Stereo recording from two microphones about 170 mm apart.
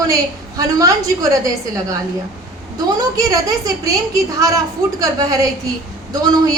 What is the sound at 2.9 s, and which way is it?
A woman's voice, 20° right (ahead or behind).